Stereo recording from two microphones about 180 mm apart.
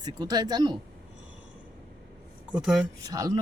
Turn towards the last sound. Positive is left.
turn(degrees=-20)  # may be behind; listen again after turning